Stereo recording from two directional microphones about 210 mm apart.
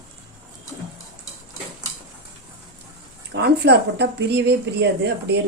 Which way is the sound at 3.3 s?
55° right (ahead or behind).